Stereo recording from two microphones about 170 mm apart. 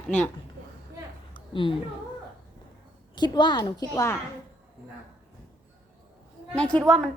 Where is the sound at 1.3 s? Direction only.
30° left (ahead or behind).